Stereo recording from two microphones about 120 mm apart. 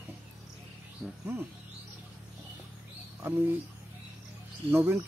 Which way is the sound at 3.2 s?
20° right (ahead or behind).